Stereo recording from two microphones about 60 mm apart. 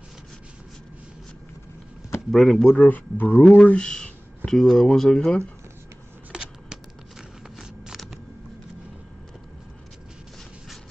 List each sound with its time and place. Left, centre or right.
2.3 s speech: centre
2.7 s speech: left
3.6 s speech: centre
6.3 s a sound: centre